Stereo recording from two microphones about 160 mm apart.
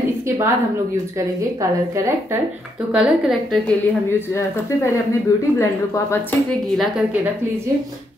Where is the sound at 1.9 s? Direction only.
20° right (ahead or behind).